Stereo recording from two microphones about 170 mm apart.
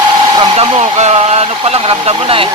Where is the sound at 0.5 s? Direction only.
40° right (ahead or behind).